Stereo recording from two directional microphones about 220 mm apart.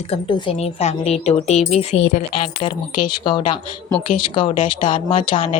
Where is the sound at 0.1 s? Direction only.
20° left (ahead or behind).